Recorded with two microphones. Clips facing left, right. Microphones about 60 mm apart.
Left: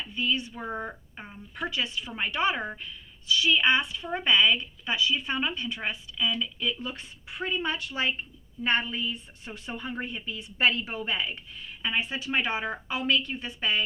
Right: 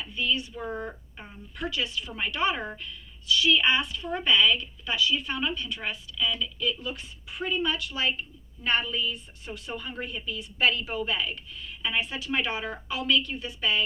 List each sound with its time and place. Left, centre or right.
0.0 s speech: left
0.6 s a woman's voice: centre